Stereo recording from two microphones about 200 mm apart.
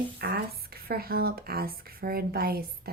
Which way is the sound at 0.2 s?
50° right (ahead or behind).